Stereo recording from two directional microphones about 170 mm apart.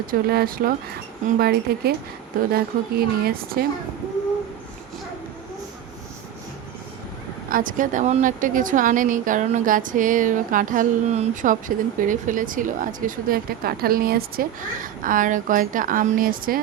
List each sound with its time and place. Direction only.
0.1 s speech: 60° right (ahead or behind)
7.5 s speech: 50° right (ahead or behind)